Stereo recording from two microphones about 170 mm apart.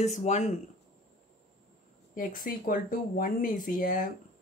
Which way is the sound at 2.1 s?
55° left (ahead or behind).